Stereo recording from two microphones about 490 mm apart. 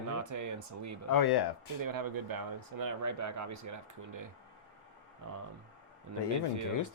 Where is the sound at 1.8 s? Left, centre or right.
Right.